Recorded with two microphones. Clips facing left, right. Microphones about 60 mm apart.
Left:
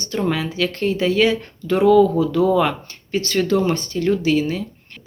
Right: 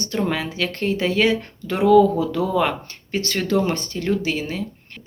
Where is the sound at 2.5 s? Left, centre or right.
Right.